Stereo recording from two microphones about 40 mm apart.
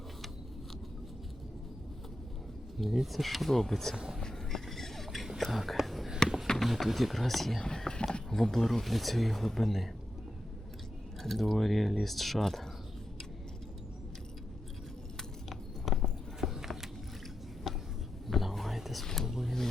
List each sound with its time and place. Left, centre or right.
2.7 s speech: centre
3.9 s speech: centre
4.2 s a sound: centre
6.6 s speech: centre
7.6 s speech: centre
11.2 s speech: centre
15.4 s biting: centre
16.4 s a sound: centre
18.3 s whispering: centre
19.0 s a sound: centre